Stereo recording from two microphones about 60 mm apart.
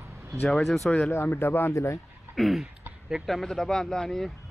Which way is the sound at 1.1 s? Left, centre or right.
Left.